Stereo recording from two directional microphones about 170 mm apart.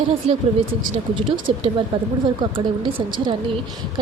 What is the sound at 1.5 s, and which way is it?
A woman's voice, 35° right (ahead or behind).